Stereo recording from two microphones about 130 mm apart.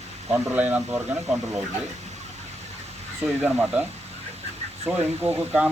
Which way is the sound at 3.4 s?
10° right (ahead or behind).